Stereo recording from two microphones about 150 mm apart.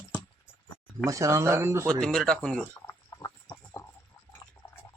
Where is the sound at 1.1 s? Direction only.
20° right (ahead or behind).